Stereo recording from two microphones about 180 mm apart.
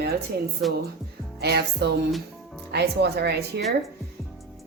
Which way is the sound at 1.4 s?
65° right (ahead or behind).